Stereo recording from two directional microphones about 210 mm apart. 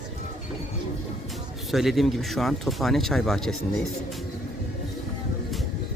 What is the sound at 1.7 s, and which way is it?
Speech, centre (ahead or behind).